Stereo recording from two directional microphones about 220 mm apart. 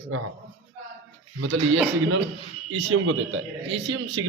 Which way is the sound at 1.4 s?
65° right (ahead or behind).